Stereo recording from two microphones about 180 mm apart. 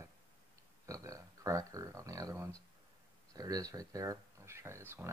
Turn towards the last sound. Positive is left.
turn(degrees=-15)  # may be behind; listen again after turning